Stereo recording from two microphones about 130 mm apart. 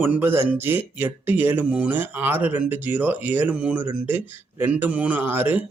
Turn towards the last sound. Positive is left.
turn(degrees=-15)  # may be behind; listen again after turning